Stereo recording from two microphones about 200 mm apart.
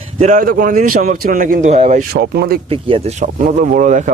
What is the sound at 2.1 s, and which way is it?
Speech, 55° right (ahead or behind).